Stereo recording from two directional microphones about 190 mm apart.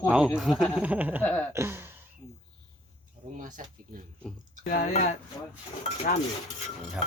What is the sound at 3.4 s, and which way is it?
Speech, 40° right (ahead or behind).